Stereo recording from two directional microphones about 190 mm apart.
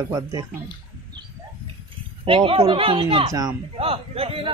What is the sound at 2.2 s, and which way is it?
Speech, 30° right (ahead or behind).